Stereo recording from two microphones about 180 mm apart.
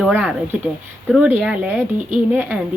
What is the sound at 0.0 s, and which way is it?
Speech, 5° right (ahead or behind).